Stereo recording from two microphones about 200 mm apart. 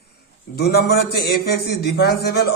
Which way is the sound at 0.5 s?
55° left (ahead or behind).